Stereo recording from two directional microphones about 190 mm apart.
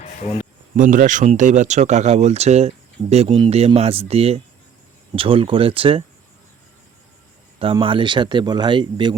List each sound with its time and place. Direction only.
0.0 s a sound: 35° left (ahead or behind)
0.8 s speech: 45° right (ahead or behind)
7.6 s speech: 30° right (ahead or behind)